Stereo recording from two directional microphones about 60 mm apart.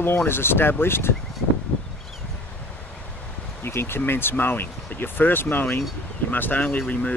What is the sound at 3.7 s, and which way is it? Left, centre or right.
Speech, left.